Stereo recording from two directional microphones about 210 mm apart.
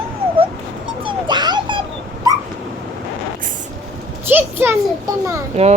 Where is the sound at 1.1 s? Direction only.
20° right (ahead or behind).